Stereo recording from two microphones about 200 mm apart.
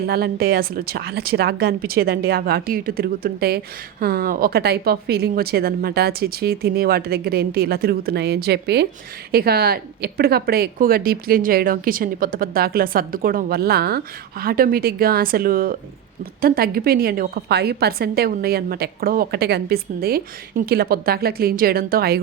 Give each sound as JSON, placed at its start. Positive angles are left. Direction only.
{"t": 0.0, "sound": "speech", "side_deg": -50}